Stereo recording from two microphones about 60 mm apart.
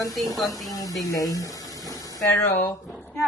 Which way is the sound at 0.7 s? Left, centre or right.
Left.